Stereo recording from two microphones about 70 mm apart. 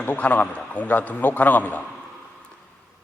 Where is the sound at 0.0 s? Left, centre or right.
Left.